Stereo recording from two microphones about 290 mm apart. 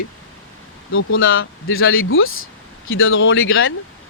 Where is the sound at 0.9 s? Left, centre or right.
Left.